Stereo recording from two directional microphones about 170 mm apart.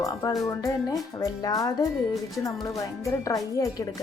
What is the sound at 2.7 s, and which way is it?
Speech, 20° left (ahead or behind).